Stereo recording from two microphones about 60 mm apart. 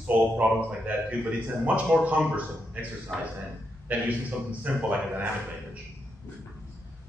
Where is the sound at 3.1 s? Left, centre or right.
Centre.